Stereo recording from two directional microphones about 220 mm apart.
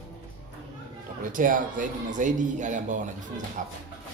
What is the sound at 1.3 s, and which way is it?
A man's voice, 35° right (ahead or behind).